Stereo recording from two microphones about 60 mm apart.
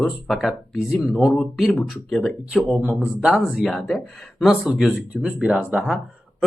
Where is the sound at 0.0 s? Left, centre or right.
Centre.